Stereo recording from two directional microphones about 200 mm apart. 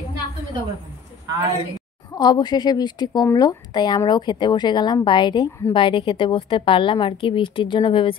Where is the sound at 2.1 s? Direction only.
20° left (ahead or behind).